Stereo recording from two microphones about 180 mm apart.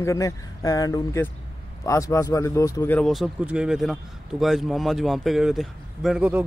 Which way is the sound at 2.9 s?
Centre (ahead or behind).